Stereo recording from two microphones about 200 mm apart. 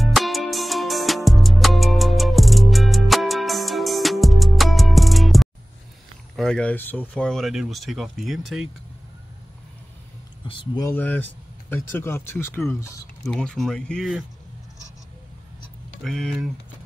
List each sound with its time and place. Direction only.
0.0 s music: centre (ahead or behind)
6.3 s speech: 5° left (ahead or behind)
10.4 s speech: 25° left (ahead or behind)
10.9 s speech: 10° left (ahead or behind)
13.3 s speech: 5° left (ahead or behind)
16.0 s speech: centre (ahead or behind)